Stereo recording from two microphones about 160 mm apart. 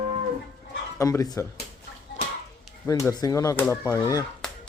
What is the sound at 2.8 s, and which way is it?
Speech, 20° left (ahead or behind).